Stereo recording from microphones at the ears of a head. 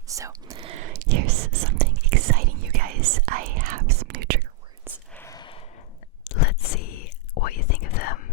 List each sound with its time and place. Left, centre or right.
0.1 s whispering: right
6.2 s whispering: left